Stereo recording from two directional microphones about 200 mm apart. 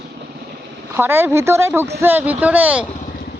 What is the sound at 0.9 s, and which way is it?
A woman's voice, 10° right (ahead or behind).